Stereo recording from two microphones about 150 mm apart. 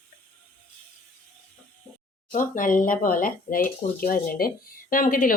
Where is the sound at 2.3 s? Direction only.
60° left (ahead or behind).